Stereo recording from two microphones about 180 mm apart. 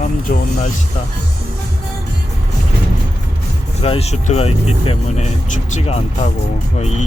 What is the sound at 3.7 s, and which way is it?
Speech, 35° left (ahead or behind).